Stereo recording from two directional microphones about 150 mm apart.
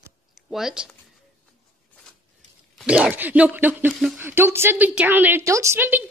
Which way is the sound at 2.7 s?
5° right (ahead or behind).